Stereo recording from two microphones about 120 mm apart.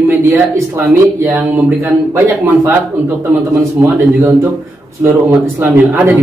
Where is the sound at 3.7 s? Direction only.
25° right (ahead or behind).